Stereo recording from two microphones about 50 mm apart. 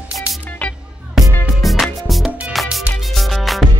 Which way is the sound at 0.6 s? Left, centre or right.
Left.